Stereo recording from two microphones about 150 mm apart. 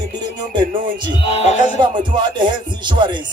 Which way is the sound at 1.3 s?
45° left (ahead or behind).